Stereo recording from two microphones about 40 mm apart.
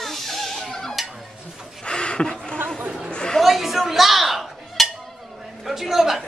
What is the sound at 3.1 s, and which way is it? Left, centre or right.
Chatter, left.